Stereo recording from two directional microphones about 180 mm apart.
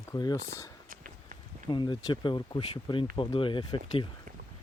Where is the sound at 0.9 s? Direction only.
50° right (ahead or behind).